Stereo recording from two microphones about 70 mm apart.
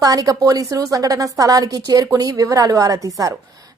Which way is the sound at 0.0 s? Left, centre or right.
Right.